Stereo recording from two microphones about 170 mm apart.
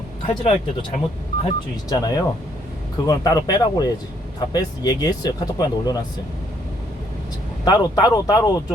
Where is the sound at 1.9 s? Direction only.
20° left (ahead or behind).